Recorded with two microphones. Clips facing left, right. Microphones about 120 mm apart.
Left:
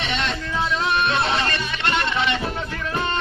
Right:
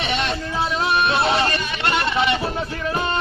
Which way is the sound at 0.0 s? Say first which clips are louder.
Right 2 dB; 15° right (ahead or behind).